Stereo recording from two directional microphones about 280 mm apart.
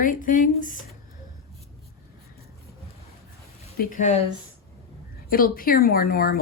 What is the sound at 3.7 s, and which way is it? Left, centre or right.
Speech, left.